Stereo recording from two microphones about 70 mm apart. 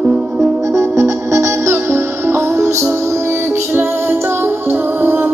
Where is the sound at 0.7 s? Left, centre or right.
Right.